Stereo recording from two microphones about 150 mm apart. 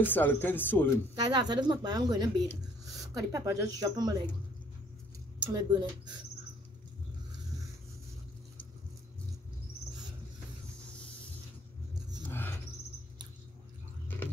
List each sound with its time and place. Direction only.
0.0 s speech: 15° left (ahead or behind)
1.2 s speech: 30° right (ahead or behind)
5.4 s speech: 30° right (ahead or behind)
12.3 s a sound: 15° left (ahead or behind)